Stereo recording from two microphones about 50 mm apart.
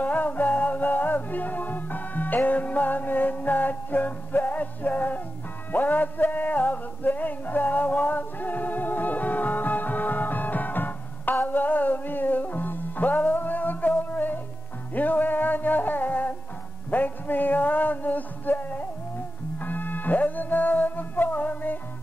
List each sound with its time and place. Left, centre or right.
0.0 s music: left